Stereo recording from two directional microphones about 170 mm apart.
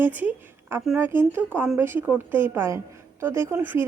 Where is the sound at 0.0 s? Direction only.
10° right (ahead or behind).